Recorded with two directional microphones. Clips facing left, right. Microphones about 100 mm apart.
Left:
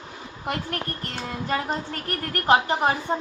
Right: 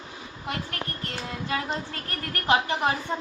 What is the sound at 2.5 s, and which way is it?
Speech, 35° left (ahead or behind).